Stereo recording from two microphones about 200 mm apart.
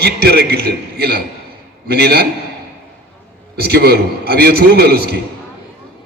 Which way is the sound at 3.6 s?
50° right (ahead or behind).